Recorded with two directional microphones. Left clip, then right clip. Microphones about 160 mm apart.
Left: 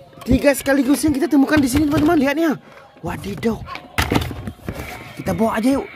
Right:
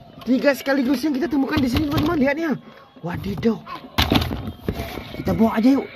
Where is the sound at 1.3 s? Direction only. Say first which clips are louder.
Left 6 dB; 35° left (ahead or behind).